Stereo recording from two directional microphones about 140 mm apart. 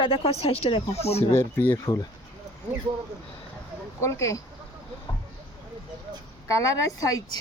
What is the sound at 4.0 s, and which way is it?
Speech, 20° left (ahead or behind).